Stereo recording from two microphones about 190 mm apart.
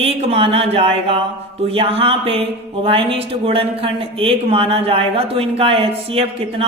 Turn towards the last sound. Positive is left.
turn(degrees=-30)  # may be behind; listen again after turning